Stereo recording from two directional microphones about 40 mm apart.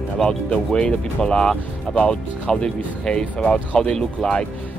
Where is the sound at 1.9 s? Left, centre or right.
Left.